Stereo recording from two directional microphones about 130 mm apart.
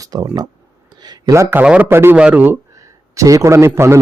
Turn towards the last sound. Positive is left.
turn(degrees=-20)  # may be behind; listen again after turning